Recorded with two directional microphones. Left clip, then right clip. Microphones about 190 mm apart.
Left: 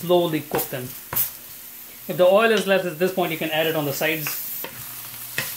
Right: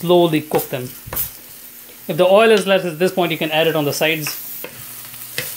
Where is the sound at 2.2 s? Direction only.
30° right (ahead or behind).